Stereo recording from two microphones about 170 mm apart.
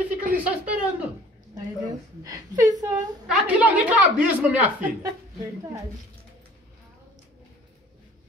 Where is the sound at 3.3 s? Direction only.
10° right (ahead or behind).